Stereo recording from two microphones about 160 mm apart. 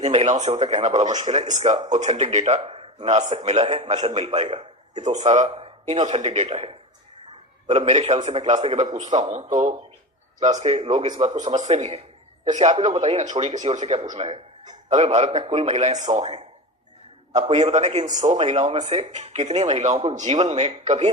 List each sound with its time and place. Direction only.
0.0 s speech: 45° right (ahead or behind)